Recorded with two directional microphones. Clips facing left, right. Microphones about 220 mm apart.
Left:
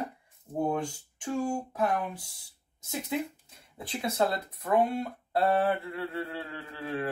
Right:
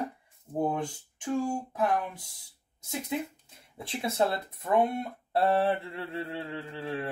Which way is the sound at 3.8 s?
25° right (ahead or behind).